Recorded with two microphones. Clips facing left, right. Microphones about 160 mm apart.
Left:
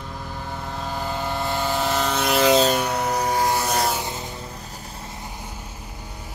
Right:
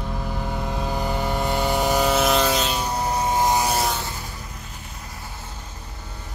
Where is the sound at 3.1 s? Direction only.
20° right (ahead or behind).